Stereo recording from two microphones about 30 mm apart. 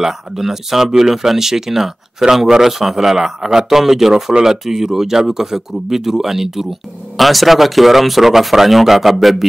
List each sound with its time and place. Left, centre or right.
0.0 s speech: centre
7.2 s speech: centre